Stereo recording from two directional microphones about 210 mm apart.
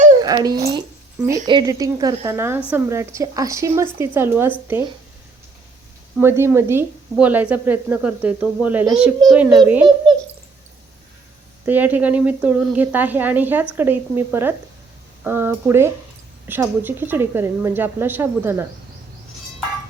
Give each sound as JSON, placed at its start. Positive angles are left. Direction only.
{"t": 0.2, "sound": "speech", "side_deg": -20}
{"t": 6.1, "sound": "a child's voice", "side_deg": -10}
{"t": 11.6, "sound": "speech", "side_deg": -10}